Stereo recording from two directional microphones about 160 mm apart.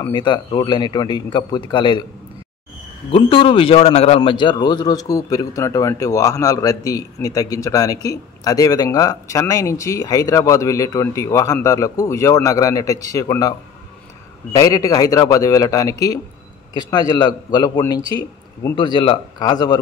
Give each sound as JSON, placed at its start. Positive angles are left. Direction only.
{"t": 0.1, "sound": "a man's voice", "side_deg": 30}
{"t": 3.1, "sound": "a man's voice", "side_deg": 35}